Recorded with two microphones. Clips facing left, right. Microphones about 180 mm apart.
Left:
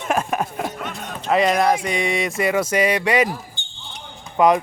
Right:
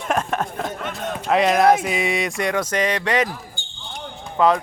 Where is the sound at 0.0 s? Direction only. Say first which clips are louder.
Left 1 dB; 5° left (ahead or behind).